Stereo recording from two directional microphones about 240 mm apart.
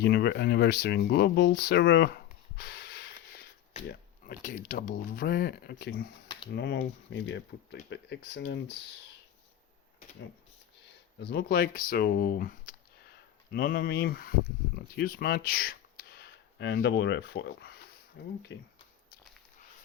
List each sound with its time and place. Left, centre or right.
0.0 s speech: left
2.6 s snort: left
3.8 s a sound: left
4.4 s speech: left
11.2 s speech: left